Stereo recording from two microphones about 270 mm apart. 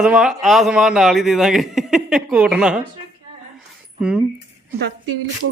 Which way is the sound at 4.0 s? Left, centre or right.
Centre.